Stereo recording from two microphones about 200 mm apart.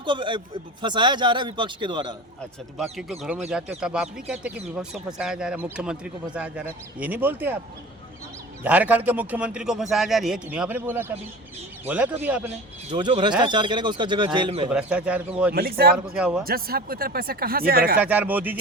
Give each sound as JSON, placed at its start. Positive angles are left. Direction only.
{"t": 0.0, "sound": "a man's voice", "side_deg": -25}
{"t": 2.7, "sound": "speech", "side_deg": 0}
{"t": 8.6, "sound": "a man's voice", "side_deg": -10}
{"t": 12.9, "sound": "a man's voice", "side_deg": -25}
{"t": 14.7, "sound": "speech", "side_deg": -5}
{"t": 15.5, "sound": "speech", "side_deg": -50}
{"t": 16.1, "sound": "speech", "side_deg": -5}
{"t": 16.4, "sound": "speech", "side_deg": -50}
{"t": 17.9, "sound": "a man's voice", "side_deg": -10}